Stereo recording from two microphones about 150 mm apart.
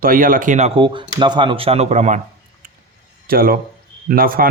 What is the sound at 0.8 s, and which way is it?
Speech, 35° right (ahead or behind).